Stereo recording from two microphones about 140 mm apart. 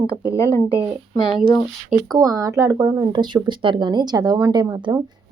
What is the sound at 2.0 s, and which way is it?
Speech, 25° right (ahead or behind).